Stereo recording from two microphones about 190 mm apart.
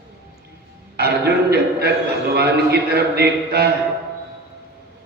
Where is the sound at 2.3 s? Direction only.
55° right (ahead or behind).